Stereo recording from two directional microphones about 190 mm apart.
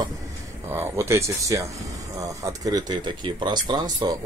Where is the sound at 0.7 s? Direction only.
15° right (ahead or behind).